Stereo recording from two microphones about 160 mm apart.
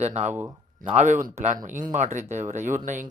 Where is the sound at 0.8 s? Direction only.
50° right (ahead or behind).